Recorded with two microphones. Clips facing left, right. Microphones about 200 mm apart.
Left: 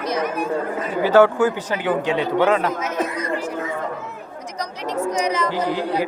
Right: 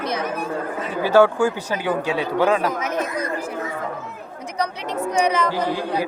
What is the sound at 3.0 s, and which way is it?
Speech, 30° left (ahead or behind).